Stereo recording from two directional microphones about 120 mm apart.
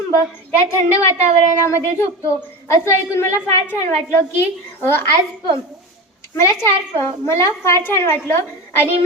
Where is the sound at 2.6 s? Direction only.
25° left (ahead or behind).